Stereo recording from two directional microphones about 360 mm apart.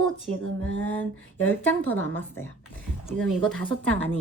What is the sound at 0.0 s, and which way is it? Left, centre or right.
Speech, centre.